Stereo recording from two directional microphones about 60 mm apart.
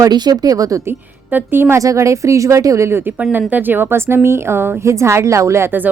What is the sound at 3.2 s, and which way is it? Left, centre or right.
A woman's voice, right.